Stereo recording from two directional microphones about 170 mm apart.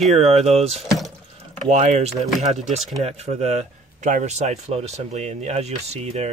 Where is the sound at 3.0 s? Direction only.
40° right (ahead or behind).